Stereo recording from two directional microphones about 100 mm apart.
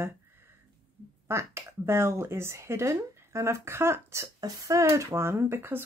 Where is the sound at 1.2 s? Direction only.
25° right (ahead or behind).